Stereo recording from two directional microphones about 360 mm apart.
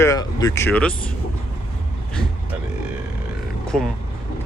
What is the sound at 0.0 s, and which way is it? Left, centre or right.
Speech, centre.